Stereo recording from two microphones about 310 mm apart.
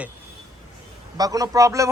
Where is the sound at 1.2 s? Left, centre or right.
Centre.